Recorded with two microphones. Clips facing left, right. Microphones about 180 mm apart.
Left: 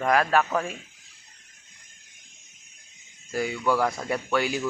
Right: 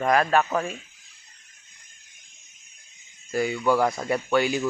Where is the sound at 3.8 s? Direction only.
15° right (ahead or behind).